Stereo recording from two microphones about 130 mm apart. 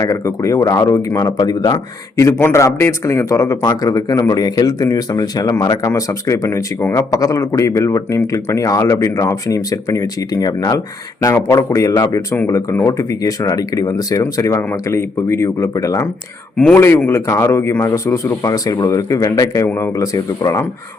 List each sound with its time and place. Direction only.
0.0 s speech: 25° left (ahead or behind)